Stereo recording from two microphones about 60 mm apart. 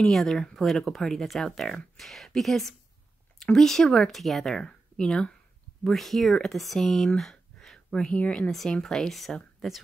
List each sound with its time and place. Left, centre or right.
0.0 s speech: centre
7.2 s a sound: centre
8.1 s speech: left
8.5 s speech: centre